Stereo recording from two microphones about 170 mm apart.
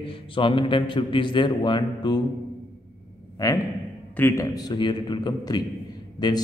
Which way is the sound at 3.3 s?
20° left (ahead or behind).